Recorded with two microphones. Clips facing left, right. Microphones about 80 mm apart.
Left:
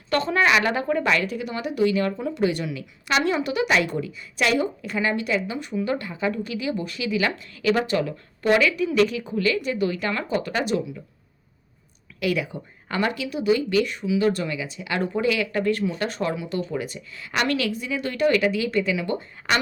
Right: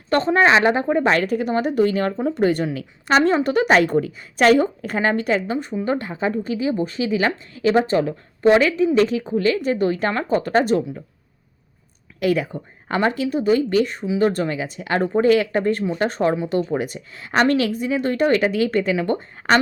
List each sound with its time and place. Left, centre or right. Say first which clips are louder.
0.1 s speech: right 5 dB; right
1.1 s speech: right 6 dB; right
12.2 s speech: right 5 dB; right